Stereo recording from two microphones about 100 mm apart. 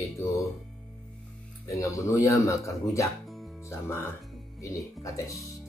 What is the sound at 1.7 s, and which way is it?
Speech, 30° left (ahead or behind).